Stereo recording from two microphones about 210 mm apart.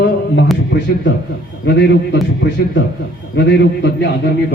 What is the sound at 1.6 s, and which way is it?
Speech, 55° left (ahead or behind).